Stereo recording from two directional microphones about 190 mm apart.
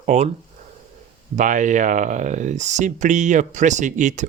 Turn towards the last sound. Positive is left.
turn(degrees=-40)  # may be behind; listen again after turning